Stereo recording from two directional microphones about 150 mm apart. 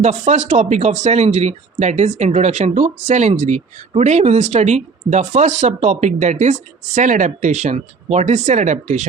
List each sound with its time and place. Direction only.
0.0 s speech: 50° right (ahead or behind)